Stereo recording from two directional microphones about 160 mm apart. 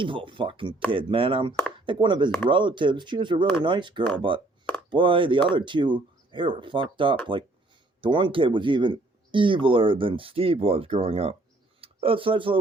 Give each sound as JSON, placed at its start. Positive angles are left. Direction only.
{"t": 0.0, "sound": "speech", "side_deg": -30}